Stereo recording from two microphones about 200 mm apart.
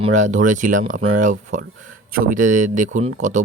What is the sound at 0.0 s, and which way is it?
Speech, 35° right (ahead or behind).